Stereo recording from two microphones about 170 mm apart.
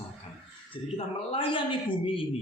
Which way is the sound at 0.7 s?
35° left (ahead or behind).